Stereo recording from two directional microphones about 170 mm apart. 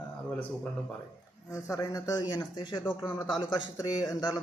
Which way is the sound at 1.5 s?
20° left (ahead or behind).